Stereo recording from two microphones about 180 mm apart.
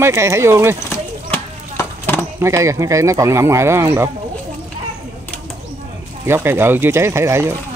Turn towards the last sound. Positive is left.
turn(degrees=-15)  # may be behind; listen again after turning